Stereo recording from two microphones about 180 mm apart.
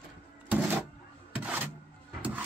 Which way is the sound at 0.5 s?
10° right (ahead or behind).